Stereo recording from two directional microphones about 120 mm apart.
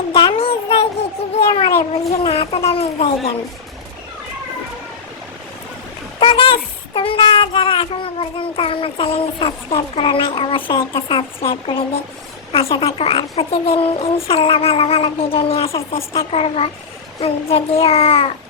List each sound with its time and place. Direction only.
0.1 s child singing: 45° left (ahead or behind)
1.4 s speech: 50° left (ahead or behind)
6.1 s speech: 45° left (ahead or behind)